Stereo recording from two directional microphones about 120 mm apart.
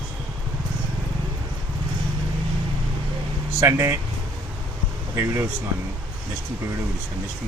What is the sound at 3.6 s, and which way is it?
Speech, 25° right (ahead or behind).